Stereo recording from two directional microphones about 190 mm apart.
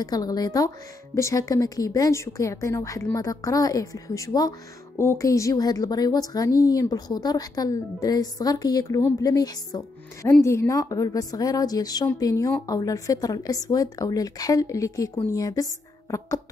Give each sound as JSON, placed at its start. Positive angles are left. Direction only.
{"t": 0.0, "sound": "a woman's voice", "side_deg": 20}